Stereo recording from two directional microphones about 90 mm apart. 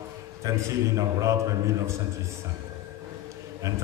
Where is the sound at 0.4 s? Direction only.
35° right (ahead or behind).